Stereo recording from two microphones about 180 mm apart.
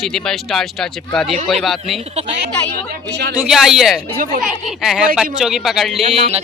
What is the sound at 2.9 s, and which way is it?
Speech, 65° right (ahead or behind).